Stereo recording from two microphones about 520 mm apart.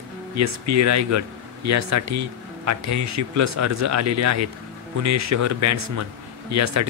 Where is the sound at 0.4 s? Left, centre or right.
Right.